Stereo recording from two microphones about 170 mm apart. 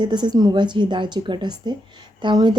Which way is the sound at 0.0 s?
25° right (ahead or behind).